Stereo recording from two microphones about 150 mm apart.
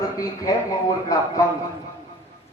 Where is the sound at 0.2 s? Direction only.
25° left (ahead or behind).